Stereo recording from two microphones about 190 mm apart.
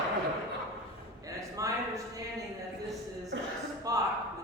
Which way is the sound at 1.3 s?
15° right (ahead or behind).